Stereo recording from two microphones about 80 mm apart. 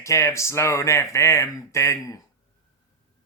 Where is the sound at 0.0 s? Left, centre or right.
Left.